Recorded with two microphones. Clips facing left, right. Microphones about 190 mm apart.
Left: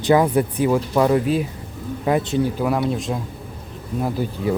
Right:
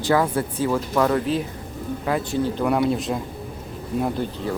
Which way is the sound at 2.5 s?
Centre (ahead or behind).